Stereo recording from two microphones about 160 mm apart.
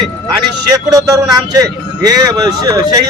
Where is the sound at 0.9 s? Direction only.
25° right (ahead or behind).